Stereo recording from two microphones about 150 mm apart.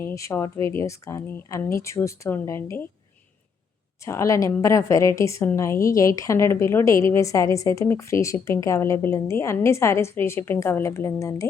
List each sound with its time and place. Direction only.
0.0 s a woman's voice: 20° left (ahead or behind)
4.0 s a woman's voice: 20° left (ahead or behind)